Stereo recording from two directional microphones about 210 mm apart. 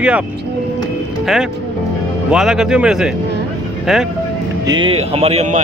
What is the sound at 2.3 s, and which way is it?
Speech, 5° right (ahead or behind).